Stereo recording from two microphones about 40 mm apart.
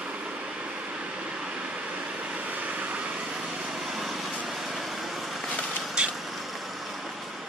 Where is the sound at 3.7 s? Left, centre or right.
Centre.